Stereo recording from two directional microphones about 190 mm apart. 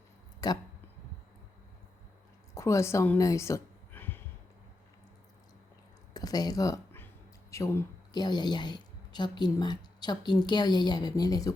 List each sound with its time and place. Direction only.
0.4 s a woman's voice: 20° left (ahead or behind)
2.6 s a woman's voice: 15° left (ahead or behind)
6.1 s a sound: 20° left (ahead or behind)
7.5 s a woman's voice: 15° left (ahead or behind)